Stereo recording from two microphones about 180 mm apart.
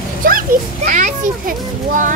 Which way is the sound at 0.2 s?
50° right (ahead or behind).